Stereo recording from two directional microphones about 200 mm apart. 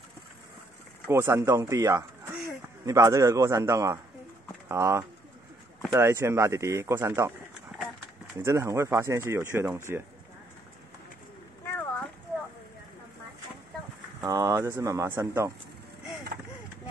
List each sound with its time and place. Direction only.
1.0 s speech: 15° right (ahead or behind)
8.4 s speech: 15° right (ahead or behind)
11.6 s a sound: 10° left (ahead or behind)
14.2 s speech: 15° right (ahead or behind)